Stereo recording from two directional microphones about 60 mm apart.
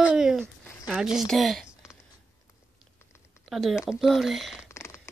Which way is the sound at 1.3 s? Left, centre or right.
Centre.